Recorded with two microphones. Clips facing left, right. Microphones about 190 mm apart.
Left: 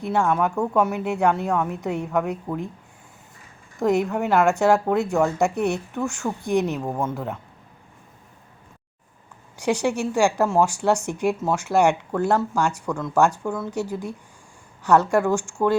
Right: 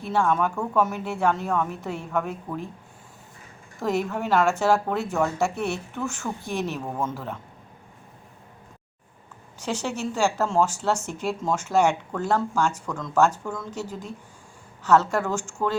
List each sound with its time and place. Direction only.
0.0 s speech: 15° left (ahead or behind)
3.8 s speech: 15° left (ahead or behind)
9.6 s speech: 15° left (ahead or behind)